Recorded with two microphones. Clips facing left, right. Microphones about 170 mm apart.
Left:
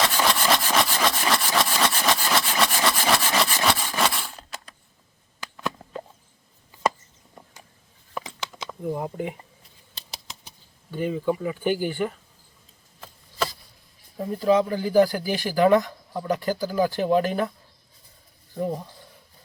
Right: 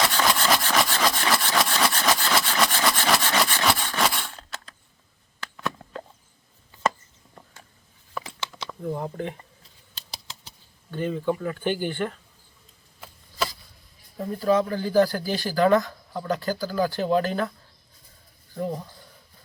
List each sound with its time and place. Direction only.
0.3 s engine: 5° left (ahead or behind)
5.4 s a sound: 10° left (ahead or behind)
8.1 s a sound: 15° left (ahead or behind)
10.9 s speech: 10° left (ahead or behind)
14.2 s speech: 10° left (ahead or behind)
18.6 s speech: 15° left (ahead or behind)